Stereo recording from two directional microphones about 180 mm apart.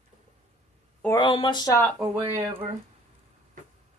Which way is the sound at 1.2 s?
25° left (ahead or behind).